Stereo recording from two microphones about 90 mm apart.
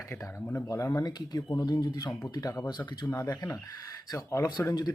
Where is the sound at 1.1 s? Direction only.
50° left (ahead or behind).